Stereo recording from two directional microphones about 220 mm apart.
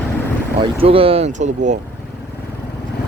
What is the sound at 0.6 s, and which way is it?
Speech, 25° right (ahead or behind).